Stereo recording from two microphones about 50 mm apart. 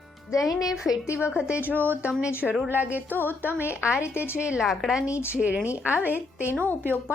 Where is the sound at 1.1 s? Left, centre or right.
Right.